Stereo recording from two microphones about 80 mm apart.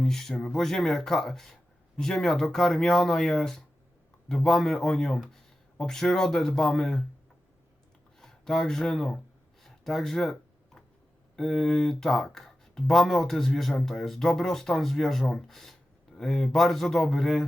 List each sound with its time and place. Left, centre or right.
0.0 s speech: centre
8.2 s speech: centre
11.3 s speech: centre